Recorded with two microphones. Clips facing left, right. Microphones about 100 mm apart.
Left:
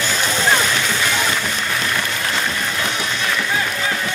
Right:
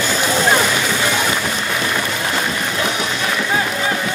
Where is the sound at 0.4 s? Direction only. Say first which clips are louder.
Right 2 dB; 15° right (ahead or behind).